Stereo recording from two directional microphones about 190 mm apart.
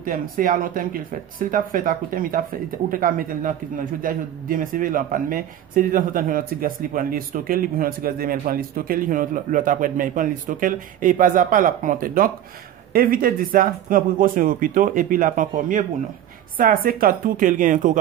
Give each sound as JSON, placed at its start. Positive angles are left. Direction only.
{"t": 0.0, "sound": "speech", "side_deg": -50}